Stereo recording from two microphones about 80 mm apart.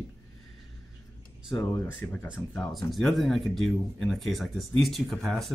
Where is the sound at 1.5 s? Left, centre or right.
Left.